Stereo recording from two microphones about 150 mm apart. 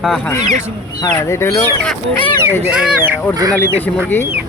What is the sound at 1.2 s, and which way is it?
Speech, 20° left (ahead or behind).